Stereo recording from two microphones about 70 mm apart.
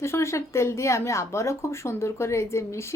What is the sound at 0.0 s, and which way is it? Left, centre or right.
A woman's voice, left.